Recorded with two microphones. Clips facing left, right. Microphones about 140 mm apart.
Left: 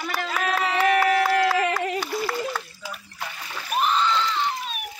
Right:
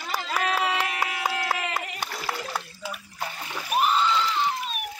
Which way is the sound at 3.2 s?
30° right (ahead or behind).